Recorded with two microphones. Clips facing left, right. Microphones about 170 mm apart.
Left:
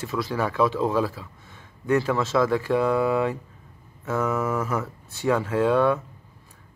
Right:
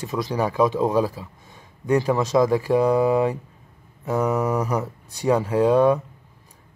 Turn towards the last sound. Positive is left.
turn(degrees=-15)  # may be behind; listen again after turning